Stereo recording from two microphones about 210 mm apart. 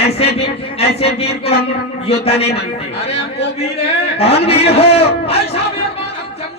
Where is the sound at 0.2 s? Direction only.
30° left (ahead or behind).